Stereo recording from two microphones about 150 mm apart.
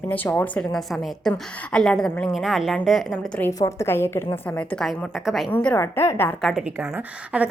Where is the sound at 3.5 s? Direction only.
20° left (ahead or behind).